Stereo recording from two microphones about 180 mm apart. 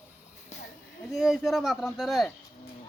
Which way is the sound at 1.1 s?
Centre (ahead or behind).